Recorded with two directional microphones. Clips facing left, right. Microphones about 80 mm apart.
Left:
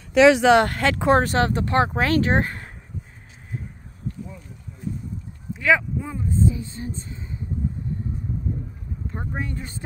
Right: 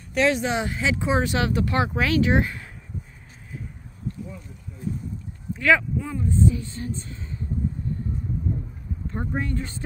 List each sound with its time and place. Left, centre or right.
0.2 s speech: left
1.2 s speech: left
5.6 s speech: centre
5.9 s a sound: centre
9.1 s speech: centre